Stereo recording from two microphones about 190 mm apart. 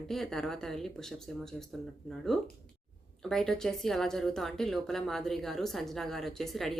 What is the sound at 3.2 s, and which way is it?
A woman's voice, centre (ahead or behind).